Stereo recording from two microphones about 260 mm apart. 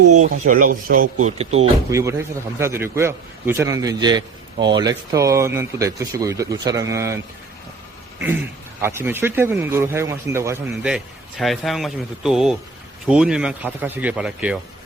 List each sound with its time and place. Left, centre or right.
0.2 s speech: right
1.9 s a man's voice: centre
8.8 s a man's voice: centre